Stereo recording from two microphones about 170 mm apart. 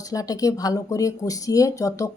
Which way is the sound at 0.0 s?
20° left (ahead or behind).